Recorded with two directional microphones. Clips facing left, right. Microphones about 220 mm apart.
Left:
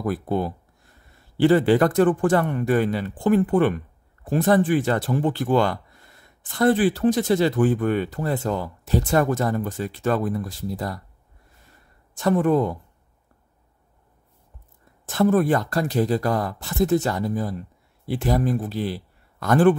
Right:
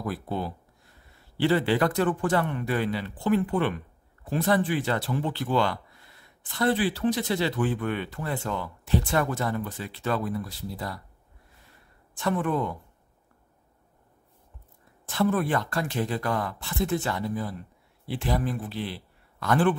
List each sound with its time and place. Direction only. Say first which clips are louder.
0.0 s speech: left 7 dB; 50° left (ahead or behind)
12.2 s speech: left 7 dB; 40° left (ahead or behind)
15.0 s a man's voice: left 6 dB; 45° left (ahead or behind)